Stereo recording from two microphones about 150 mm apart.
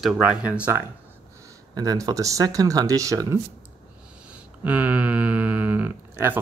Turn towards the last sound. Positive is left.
turn(degrees=-10)  # may be behind; listen again after turning